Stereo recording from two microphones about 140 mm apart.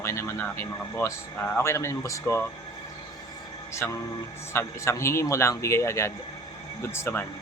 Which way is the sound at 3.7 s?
20° left (ahead or behind).